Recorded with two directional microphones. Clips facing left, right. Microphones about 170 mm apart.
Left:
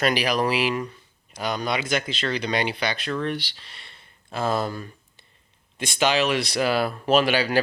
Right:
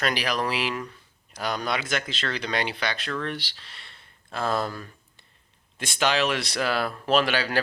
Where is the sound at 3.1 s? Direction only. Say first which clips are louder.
Left 6 dB; 15° left (ahead or behind).